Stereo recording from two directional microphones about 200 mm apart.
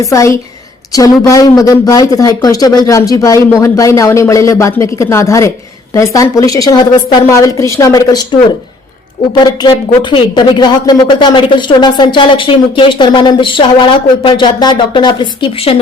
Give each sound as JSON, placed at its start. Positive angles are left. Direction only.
{"t": 0.0, "sound": "speech", "side_deg": 15}